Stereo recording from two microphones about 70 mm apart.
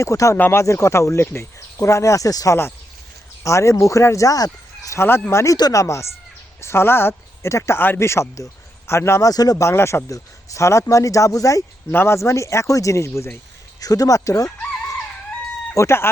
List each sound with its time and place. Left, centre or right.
0.0 s speech: left
4.9 s speech: left
9.3 s speech: left
9.6 s speech: left
11.9 s speech: left
13.7 s speech: left
15.7 s speech: left